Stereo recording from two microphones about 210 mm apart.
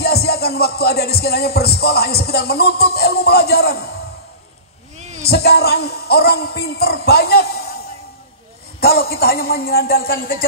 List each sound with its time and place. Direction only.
0.0 s music: 50° left (ahead or behind)
5.2 s music: 50° left (ahead or behind)
8.8 s music: 45° left (ahead or behind)